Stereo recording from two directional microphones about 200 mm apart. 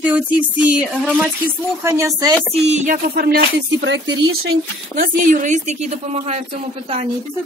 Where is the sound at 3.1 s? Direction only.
55° right (ahead or behind).